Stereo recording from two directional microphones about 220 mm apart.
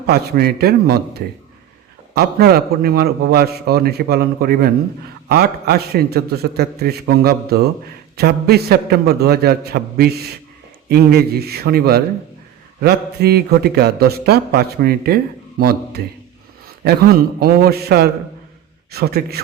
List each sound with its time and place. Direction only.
0.1 s a man's voice: 45° right (ahead or behind)